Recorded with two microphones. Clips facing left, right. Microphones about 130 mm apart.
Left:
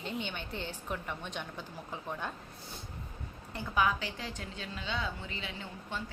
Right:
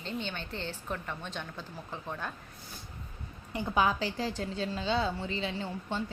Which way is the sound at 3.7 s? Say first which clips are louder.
Right 2 dB; 30° right (ahead or behind).